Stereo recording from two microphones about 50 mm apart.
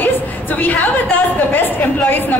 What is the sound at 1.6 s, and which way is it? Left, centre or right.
Speech, left.